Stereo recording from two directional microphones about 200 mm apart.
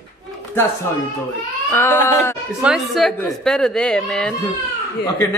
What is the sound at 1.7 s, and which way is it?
Speech, 10° left (ahead or behind).